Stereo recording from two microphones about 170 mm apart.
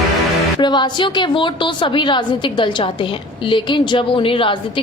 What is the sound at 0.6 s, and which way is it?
A woman's voice, 25° left (ahead or behind).